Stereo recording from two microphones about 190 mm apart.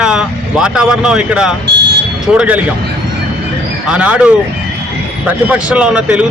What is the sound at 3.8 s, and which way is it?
A man's voice, 5° right (ahead or behind).